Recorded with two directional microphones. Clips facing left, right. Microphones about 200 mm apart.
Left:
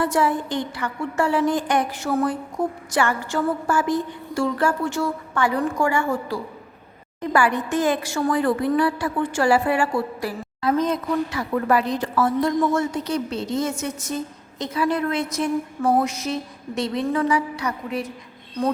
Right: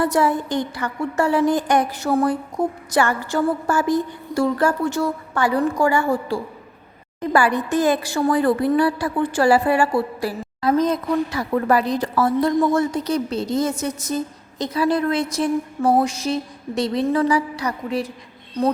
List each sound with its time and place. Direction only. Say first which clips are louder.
0.0 s speech: right 2 dB; 40° right (ahead or behind)